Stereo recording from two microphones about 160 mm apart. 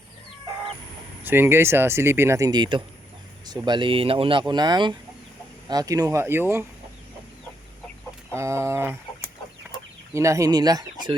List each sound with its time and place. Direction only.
1.2 s speech: 15° right (ahead or behind)
8.4 s speech: 15° right (ahead or behind)
10.2 s speech: 20° right (ahead or behind)